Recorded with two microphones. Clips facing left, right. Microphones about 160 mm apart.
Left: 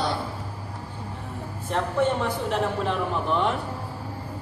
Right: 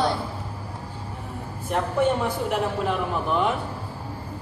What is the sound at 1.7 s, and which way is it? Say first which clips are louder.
A woman's voice: right 1 dB; 10° right (ahead or behind).